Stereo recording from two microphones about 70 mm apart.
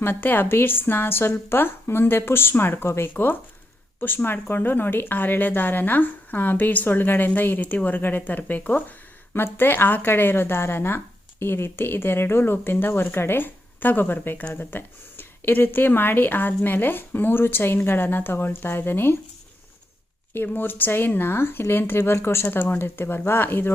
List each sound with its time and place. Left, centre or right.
0.0 s a woman's voice: left
20.3 s a woman's voice: left